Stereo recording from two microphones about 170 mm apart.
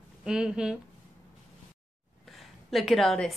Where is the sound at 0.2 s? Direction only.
5° right (ahead or behind).